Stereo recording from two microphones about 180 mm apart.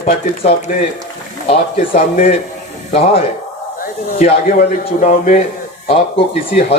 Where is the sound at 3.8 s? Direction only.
45° left (ahead or behind).